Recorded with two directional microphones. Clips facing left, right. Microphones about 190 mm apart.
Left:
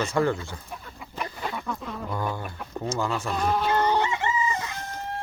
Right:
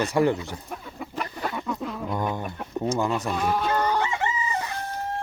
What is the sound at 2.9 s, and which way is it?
Speech, 20° right (ahead or behind).